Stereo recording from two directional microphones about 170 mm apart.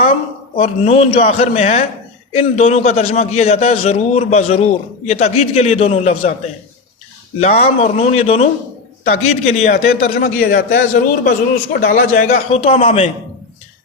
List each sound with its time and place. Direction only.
0.5 s a man's voice: 40° left (ahead or behind)
7.3 s a man's voice: 40° left (ahead or behind)
10.4 s a man's voice: 50° left (ahead or behind)
12.6 s a man's voice: 35° left (ahead or behind)